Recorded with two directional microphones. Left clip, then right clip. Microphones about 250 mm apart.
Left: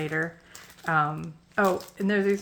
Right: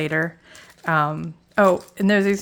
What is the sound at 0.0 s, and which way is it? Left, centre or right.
Speech, right.